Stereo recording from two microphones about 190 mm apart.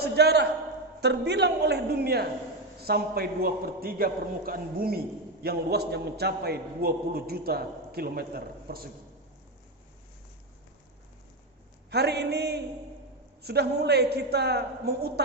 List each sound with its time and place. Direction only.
0.0 s a man's voice: 60° right (ahead or behind)
11.9 s a man's voice: 60° right (ahead or behind)